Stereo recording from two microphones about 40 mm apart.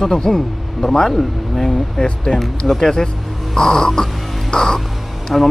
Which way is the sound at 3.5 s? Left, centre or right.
Centre.